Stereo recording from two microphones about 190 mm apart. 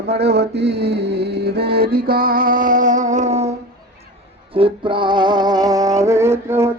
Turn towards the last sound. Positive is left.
turn(degrees=-15)  # may be behind; listen again after turning